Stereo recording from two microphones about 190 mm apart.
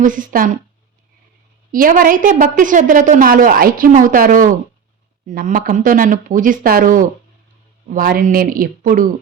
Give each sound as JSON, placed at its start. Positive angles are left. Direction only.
{"t": 0.0, "sound": "a woman's voice", "side_deg": -45}
{"t": 1.7, "sound": "a woman's voice", "side_deg": -45}